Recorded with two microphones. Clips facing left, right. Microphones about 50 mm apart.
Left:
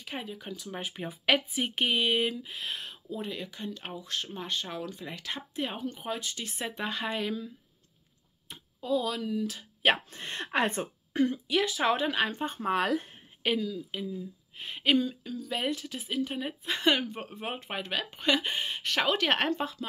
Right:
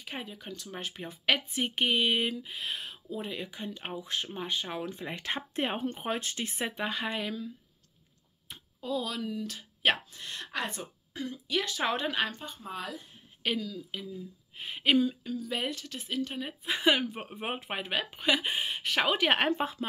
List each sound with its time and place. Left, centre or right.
0.0 s a woman's voice: centre
4.8 s speech: right
6.7 s a woman's voice: centre
10.1 s speech: left
11.4 s a woman's voice: centre
12.5 s speech: left
13.4 s speech: centre
14.6 s a woman's voice: centre
19.6 s speech: right